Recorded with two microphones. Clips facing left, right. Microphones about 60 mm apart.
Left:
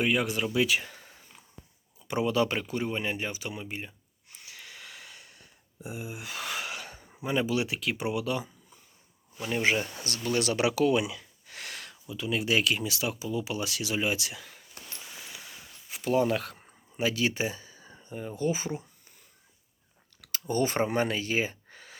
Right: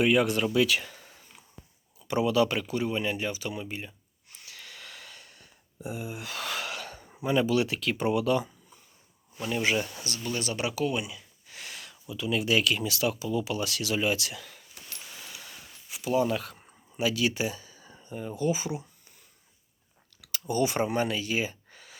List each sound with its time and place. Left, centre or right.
0.0 s speech: centre
0.5 s speech: centre
0.9 s a sound: left
2.0 s a sound: left
7.3 s speech: centre
9.5 s speech: left
10.2 s speech: left
11.4 s a sound: left
12.0 s speech: left
15.9 s speech: left
16.6 s speech: left
20.2 s speech: left